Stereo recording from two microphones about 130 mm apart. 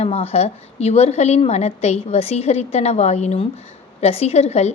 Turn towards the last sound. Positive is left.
turn(degrees=55)  # may be behind; listen again after turning